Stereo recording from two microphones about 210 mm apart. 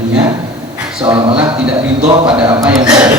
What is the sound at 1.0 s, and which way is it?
Speech, 25° right (ahead or behind).